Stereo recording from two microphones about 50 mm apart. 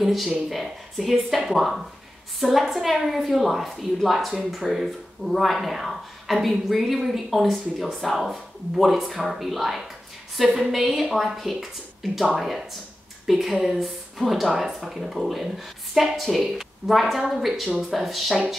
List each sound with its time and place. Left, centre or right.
0.0 s a woman's voice: centre